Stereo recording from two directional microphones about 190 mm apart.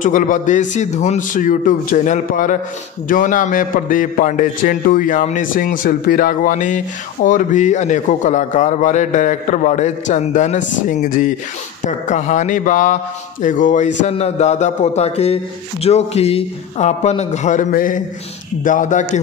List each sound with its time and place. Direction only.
0.0 s a man's voice: 40° left (ahead or behind)